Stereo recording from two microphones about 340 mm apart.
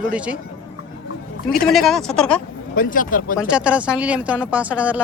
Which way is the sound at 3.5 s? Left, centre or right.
Centre.